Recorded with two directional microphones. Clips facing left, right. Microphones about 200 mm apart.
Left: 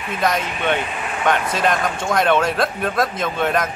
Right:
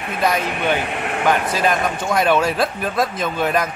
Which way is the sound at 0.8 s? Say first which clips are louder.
Right 3 dB; 65° right (ahead or behind).